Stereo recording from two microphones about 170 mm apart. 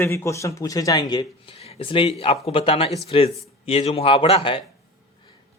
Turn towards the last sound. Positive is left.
turn(degrees=35)  # may be behind; listen again after turning